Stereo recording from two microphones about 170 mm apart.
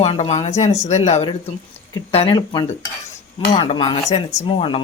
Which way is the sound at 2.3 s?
25° left (ahead or behind).